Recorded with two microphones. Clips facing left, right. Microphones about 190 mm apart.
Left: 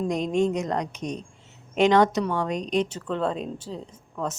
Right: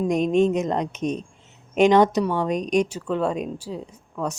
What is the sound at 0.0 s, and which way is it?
A woman's voice, 20° right (ahead or behind).